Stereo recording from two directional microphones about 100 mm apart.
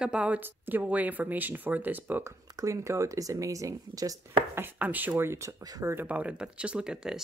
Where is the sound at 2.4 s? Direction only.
35° right (ahead or behind).